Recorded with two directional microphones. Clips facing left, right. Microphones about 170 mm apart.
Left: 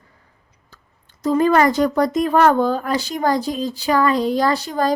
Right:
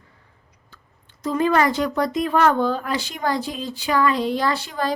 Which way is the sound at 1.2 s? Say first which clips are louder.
Left 4 dB; 40° left (ahead or behind).